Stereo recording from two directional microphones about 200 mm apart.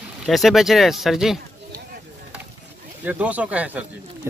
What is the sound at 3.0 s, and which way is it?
Speech, 10° right (ahead or behind).